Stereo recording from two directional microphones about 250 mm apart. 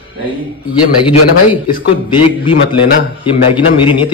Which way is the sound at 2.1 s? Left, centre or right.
Left.